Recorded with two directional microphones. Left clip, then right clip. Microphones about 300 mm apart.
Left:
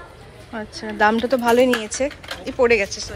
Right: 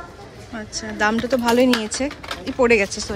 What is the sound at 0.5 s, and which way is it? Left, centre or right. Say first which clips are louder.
Speech: left 2 dB; centre.